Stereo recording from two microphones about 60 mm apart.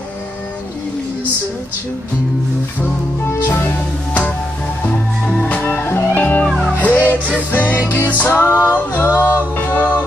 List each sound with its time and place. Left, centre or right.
5.2 s music: centre
8.7 s a capella: left
9.6 s music: left